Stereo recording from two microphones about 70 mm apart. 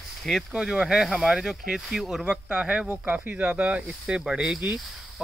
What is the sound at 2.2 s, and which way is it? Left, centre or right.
Speech, centre.